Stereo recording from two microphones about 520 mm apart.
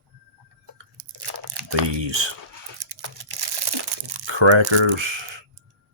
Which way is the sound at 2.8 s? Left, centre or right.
Right.